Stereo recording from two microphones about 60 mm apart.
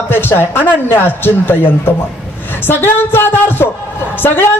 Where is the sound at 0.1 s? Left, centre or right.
Left.